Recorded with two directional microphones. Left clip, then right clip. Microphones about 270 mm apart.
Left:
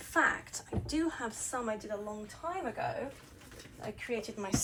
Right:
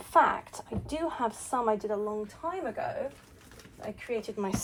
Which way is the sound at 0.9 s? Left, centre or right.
Centre.